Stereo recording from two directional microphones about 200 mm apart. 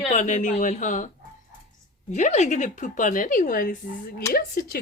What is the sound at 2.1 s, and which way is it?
Speech, 35° left (ahead or behind).